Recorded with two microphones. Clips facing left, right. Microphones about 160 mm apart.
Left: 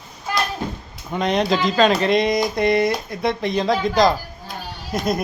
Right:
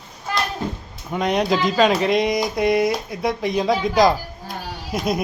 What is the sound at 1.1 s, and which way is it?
Speech, 10° right (ahead or behind).